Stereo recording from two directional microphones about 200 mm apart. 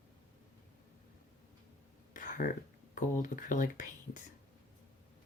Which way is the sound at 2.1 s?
40° left (ahead or behind).